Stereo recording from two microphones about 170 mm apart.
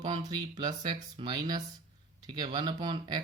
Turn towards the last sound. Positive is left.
turn(degrees=-25)  # may be behind; listen again after turning